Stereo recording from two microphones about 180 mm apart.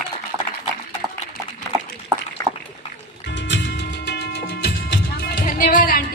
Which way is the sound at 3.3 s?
75° left (ahead or behind).